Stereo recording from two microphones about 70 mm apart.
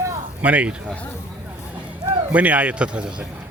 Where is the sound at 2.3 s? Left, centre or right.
Right.